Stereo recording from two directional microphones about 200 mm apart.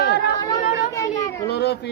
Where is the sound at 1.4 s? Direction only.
55° left (ahead or behind).